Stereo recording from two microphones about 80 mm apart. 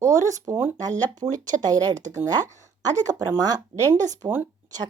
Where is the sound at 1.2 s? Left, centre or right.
Right.